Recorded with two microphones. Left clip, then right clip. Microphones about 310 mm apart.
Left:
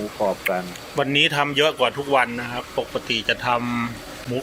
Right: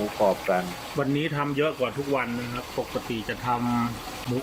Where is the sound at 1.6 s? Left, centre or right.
Left.